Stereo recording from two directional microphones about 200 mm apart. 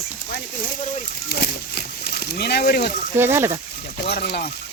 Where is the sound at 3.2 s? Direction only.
10° right (ahead or behind).